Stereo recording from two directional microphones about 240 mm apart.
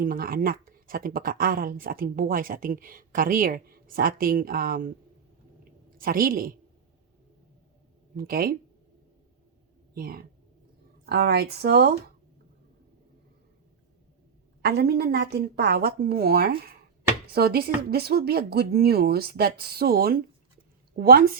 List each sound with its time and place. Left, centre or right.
0.0 s speech: right
5.9 s speech: right
8.1 s speech: right
9.9 s speech: right
14.6 s speech: right